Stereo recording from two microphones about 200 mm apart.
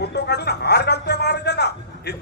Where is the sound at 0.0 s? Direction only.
55° left (ahead or behind).